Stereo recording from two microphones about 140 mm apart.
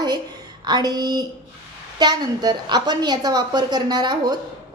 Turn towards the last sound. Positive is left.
turn(degrees=-30)  # may be behind; listen again after turning